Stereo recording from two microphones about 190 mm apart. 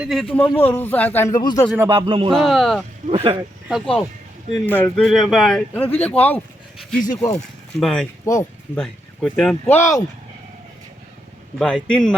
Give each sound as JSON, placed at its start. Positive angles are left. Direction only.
{"t": 0.0, "sound": "a man's voice", "side_deg": 0}
{"t": 1.9, "sound": "speech", "side_deg": -25}
{"t": 2.3, "sound": "speech", "side_deg": 0}
{"t": 3.1, "sound": "speech", "side_deg": -30}
{"t": 3.7, "sound": "speech", "side_deg": 0}
{"t": 8.2, "sound": "speech", "side_deg": 15}
{"t": 8.7, "sound": "speech", "side_deg": 5}
{"t": 9.7, "sound": "a man's voice", "side_deg": 15}
{"t": 11.6, "sound": "speech", "side_deg": 5}